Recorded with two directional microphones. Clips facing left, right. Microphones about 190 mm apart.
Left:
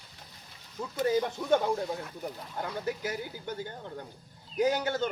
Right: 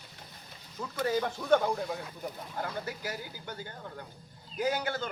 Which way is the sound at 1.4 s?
10° left (ahead or behind).